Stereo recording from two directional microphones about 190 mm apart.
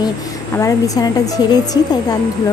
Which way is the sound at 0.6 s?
15° left (ahead or behind).